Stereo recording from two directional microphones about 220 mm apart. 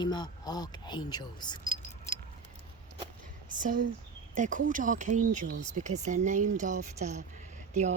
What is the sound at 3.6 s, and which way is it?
Speech, 40° right (ahead or behind).